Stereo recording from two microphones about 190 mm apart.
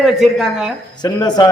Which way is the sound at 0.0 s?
Centre (ahead or behind).